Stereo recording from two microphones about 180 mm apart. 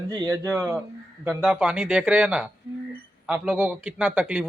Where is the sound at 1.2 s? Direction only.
10° right (ahead or behind).